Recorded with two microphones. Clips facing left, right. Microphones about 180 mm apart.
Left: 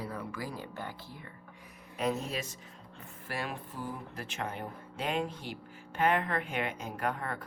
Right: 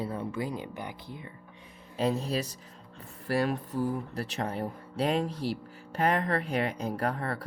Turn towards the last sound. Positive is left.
turn(degrees=-35)  # may be behind; listen again after turning